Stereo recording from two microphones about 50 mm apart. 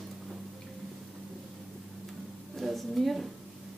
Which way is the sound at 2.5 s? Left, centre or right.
Centre.